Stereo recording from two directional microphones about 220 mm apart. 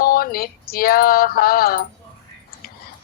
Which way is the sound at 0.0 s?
40° left (ahead or behind).